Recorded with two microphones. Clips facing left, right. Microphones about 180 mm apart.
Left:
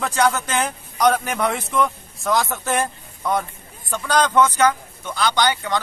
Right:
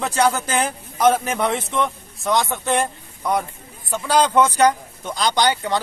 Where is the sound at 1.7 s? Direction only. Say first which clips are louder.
Left 2 dB; centre (ahead or behind).